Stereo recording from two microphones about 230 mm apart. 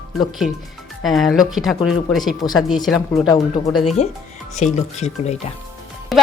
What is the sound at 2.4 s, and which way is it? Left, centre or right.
Speech, centre.